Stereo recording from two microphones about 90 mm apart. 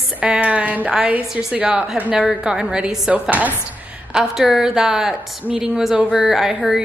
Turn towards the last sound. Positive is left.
turn(degrees=-5)  # may be behind; listen again after turning